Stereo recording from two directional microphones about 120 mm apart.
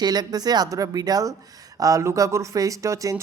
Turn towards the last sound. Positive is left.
turn(degrees=-25)  # may be behind; listen again after turning